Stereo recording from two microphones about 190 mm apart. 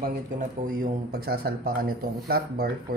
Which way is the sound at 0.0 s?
45° right (ahead or behind).